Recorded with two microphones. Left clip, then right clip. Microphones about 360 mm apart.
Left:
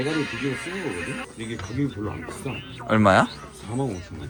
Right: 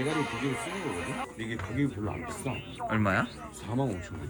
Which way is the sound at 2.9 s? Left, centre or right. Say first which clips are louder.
Left 11 dB; centre.